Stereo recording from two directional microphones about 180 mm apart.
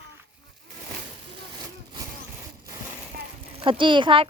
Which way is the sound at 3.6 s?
25° right (ahead or behind).